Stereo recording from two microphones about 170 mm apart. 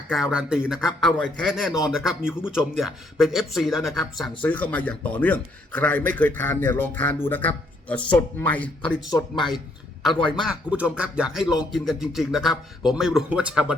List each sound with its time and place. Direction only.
0.1 s a man's voice: 5° right (ahead or behind)
9.0 s speech: 20° left (ahead or behind)
10.0 s a man's voice: centre (ahead or behind)